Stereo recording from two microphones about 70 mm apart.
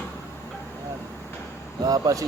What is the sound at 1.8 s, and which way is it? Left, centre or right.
Speech, right.